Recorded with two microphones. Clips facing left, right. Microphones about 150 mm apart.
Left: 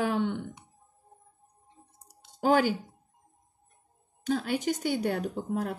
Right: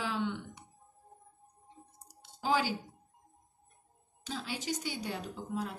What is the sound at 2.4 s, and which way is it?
Speech, 55° left (ahead or behind).